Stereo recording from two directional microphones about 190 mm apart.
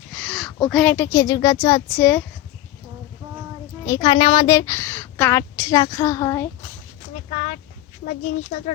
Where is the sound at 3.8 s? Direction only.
20° left (ahead or behind).